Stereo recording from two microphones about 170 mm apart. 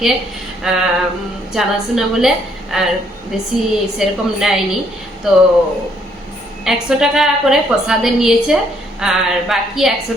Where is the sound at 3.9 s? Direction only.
Centre (ahead or behind).